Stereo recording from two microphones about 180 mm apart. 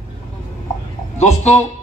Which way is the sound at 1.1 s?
40° left (ahead or behind).